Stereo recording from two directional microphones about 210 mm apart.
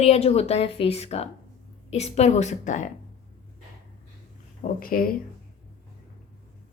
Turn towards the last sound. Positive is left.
turn(degrees=45)  # may be behind; listen again after turning